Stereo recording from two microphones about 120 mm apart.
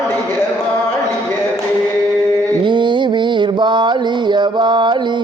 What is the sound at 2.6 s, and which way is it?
Mantra, 40° right (ahead or behind).